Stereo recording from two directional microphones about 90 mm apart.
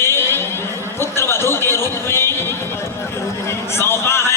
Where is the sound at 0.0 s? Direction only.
30° left (ahead or behind).